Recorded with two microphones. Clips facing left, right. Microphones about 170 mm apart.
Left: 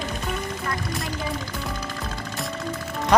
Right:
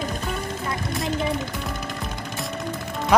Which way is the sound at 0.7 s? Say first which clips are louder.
Right 5 dB; 25° right (ahead or behind).